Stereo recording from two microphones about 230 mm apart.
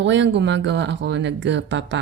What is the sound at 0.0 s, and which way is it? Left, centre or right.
Speech, right.